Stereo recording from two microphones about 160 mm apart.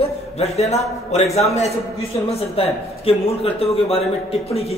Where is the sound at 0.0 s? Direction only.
40° left (ahead or behind).